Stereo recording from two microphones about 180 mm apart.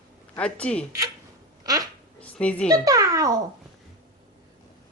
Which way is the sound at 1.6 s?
20° right (ahead or behind).